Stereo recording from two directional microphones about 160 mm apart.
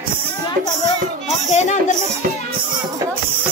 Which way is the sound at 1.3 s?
45° left (ahead or behind).